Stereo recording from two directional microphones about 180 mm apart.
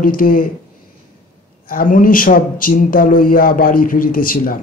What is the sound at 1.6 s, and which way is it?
Speech, 50° left (ahead or behind).